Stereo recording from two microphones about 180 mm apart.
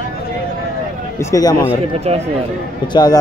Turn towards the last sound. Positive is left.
turn(degrees=20)  # may be behind; listen again after turning